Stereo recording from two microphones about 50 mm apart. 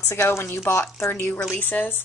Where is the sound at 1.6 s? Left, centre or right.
Left.